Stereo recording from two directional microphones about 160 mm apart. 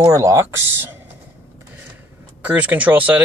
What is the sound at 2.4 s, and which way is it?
Speech, 10° right (ahead or behind).